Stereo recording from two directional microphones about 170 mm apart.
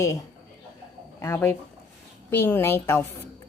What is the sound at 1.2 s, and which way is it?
A woman's voice, 15° left (ahead or behind).